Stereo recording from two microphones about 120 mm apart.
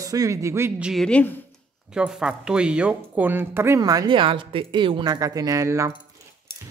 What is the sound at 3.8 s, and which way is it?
Speech, 30° right (ahead or behind).